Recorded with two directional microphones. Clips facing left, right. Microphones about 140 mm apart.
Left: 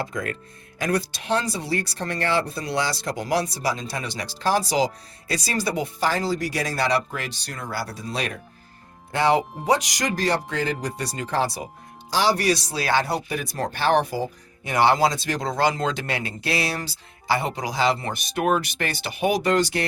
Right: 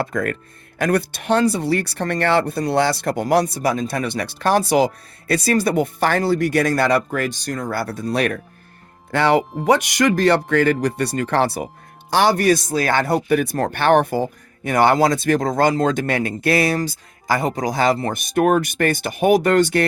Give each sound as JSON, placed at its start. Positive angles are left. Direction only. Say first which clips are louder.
{"t": 0.0, "sound": "speech", "louder": "right 6 dB", "side_deg": -60}